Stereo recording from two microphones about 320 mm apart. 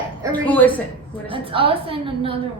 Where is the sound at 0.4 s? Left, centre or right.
Centre.